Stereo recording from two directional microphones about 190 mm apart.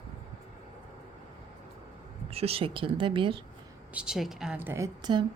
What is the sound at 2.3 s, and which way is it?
A woman's voice, 30° right (ahead or behind).